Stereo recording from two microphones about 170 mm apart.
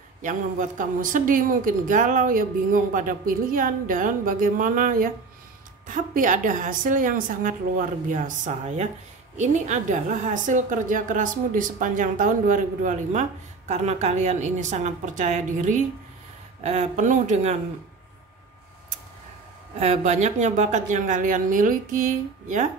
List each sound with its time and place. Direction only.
0.2 s a woman's voice: 50° right (ahead or behind)
19.8 s a woman's voice: 45° right (ahead or behind)